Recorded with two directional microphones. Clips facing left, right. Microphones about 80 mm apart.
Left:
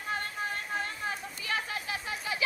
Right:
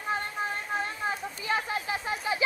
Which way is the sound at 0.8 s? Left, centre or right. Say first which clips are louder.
Right 4 dB; right.